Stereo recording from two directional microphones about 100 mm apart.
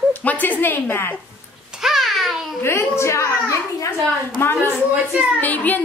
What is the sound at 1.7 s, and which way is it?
Babbling, 5° right (ahead or behind).